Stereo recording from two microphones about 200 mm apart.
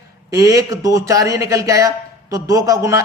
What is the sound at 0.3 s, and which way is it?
A man's voice, 15° right (ahead or behind).